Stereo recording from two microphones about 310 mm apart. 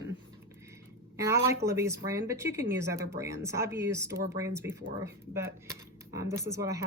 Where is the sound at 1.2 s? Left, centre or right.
Centre.